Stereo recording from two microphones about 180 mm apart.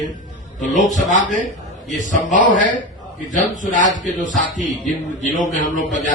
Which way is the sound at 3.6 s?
45° left (ahead or behind).